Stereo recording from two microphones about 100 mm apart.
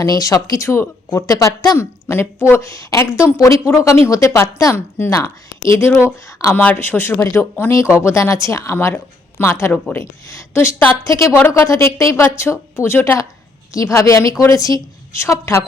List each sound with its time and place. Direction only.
0.0 s a woman's voice: 35° left (ahead or behind)